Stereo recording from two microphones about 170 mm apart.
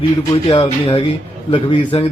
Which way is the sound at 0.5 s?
30° left (ahead or behind).